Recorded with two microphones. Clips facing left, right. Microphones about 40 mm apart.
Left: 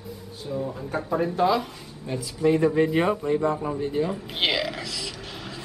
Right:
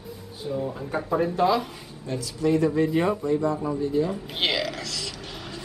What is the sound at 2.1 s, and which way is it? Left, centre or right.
Speech, left.